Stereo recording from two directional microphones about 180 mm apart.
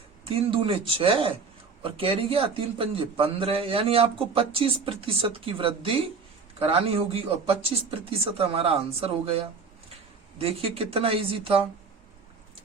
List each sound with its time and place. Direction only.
0.3 s a man's voice: 30° right (ahead or behind)